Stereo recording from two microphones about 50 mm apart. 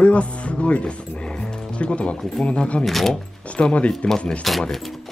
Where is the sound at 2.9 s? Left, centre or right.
Centre.